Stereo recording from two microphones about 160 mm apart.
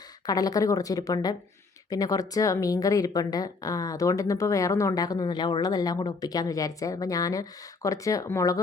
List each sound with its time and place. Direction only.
0.3 s speech: 25° left (ahead or behind)